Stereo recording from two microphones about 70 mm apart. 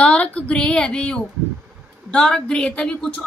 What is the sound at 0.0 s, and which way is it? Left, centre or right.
A woman's voice, centre.